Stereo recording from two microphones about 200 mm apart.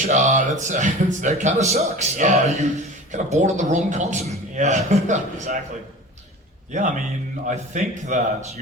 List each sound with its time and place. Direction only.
0.1 s a man's voice: 35° right (ahead or behind)
6.7 s a man's voice: 40° right (ahead or behind)